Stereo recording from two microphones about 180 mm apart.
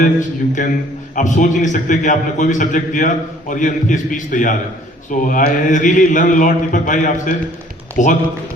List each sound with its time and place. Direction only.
0.0 s a man's voice: 45° left (ahead or behind)